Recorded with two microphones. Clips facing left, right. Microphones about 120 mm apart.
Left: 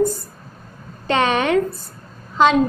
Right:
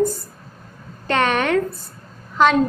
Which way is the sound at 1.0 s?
20° left (ahead or behind).